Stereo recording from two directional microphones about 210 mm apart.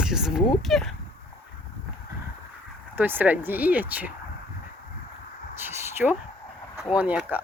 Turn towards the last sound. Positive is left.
turn(degrees=-5)  # may be behind; listen again after turning